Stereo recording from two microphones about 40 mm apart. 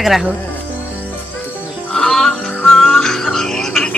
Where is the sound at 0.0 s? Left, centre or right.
Centre.